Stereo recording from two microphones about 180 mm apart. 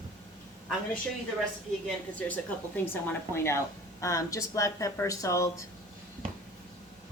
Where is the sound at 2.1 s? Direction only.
10° left (ahead or behind).